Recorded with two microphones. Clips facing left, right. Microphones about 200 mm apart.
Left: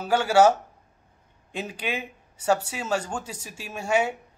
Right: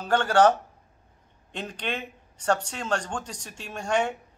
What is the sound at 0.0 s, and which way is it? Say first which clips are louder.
Speech: left 1 dB; 10° left (ahead or behind).